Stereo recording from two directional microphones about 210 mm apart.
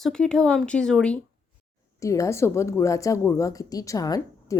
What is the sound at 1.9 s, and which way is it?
A woman's voice, 15° left (ahead or behind).